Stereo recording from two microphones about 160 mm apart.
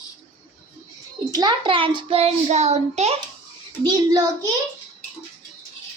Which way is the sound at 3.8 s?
25° right (ahead or behind).